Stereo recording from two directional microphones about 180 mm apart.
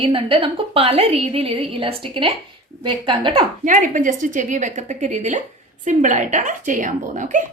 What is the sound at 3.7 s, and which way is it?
A woman's voice, 45° right (ahead or behind).